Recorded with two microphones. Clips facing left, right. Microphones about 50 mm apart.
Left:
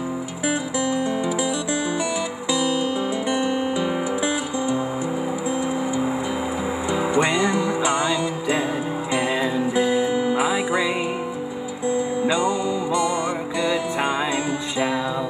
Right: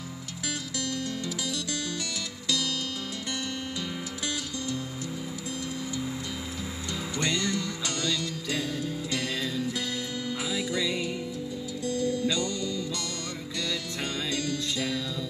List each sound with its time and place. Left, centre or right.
0.5 s music: left
2.5 s music: left
6.9 s music: left
11.9 s music: centre